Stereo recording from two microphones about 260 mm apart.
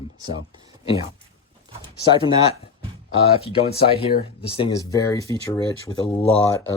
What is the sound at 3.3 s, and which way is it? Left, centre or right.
Speech, left.